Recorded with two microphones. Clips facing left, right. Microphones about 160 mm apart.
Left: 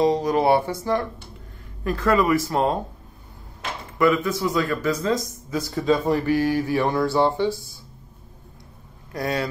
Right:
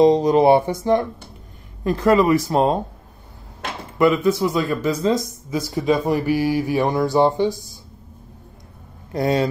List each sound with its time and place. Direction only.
0.0 s speech: 20° right (ahead or behind)
4.0 s speech: 20° right (ahead or behind)
9.1 s speech: 25° right (ahead or behind)